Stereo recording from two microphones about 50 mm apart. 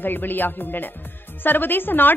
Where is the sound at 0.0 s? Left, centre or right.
Left.